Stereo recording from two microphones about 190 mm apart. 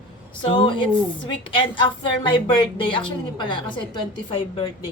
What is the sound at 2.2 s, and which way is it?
A woman's voice, 25° left (ahead or behind).